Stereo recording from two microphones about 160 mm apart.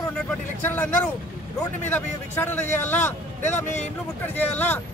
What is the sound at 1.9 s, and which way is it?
Speech, 10° left (ahead or behind).